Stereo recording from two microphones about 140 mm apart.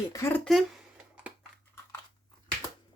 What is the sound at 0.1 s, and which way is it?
Speech, 20° left (ahead or behind).